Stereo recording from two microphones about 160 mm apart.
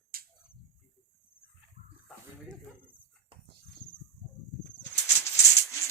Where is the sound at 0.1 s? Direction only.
70° right (ahead or behind).